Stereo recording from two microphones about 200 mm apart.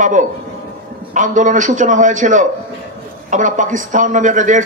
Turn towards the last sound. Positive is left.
turn(degrees=-40)  # may be behind; listen again after turning